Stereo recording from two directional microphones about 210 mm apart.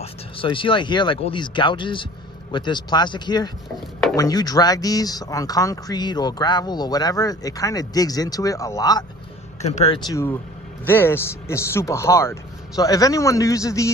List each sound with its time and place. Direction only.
0.0 s speech: 25° left (ahead or behind)
9.6 s speech: 30° left (ahead or behind)
9.9 s speech: 15° left (ahead or behind)